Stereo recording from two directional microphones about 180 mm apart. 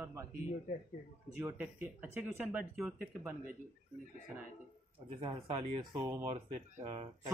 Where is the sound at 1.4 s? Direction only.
10° right (ahead or behind).